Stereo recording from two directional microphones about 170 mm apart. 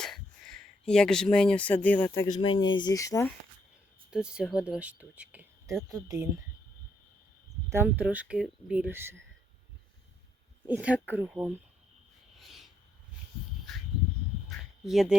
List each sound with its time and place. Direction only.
0.0 s speech: 5° left (ahead or behind)
2.3 s speech: 25° left (ahead or behind)
4.1 s speech: 5° right (ahead or behind)
7.7 s speech: 10° right (ahead or behind)
10.7 s speech: 5° right (ahead or behind)
12.4 s rub: centre (ahead or behind)
13.7 s a sound: centre (ahead or behind)